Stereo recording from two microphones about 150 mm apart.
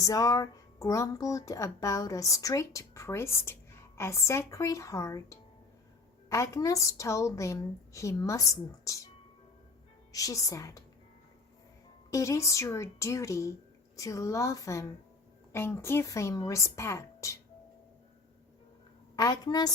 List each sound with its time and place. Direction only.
0.0 s speech: 20° left (ahead or behind)
10.1 s a woman's voice: 20° left (ahead or behind)
12.1 s speech: 20° left (ahead or behind)
19.1 s speech: 25° left (ahead or behind)